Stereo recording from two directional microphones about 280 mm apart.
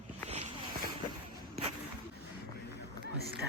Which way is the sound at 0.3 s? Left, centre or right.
Right.